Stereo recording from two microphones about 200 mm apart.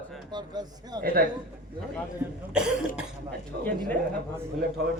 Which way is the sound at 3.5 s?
50° right (ahead or behind).